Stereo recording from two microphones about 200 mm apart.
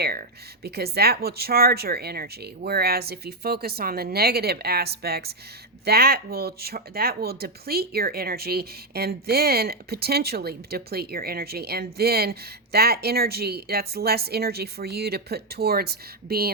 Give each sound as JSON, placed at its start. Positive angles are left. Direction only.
{"t": 0.0, "sound": "speech", "side_deg": -50}